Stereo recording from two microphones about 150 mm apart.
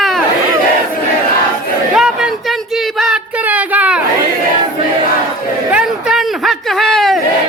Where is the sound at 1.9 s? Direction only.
5° right (ahead or behind).